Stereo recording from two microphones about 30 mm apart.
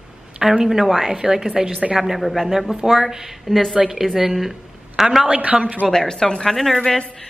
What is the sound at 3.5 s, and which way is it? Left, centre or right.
Speech, centre.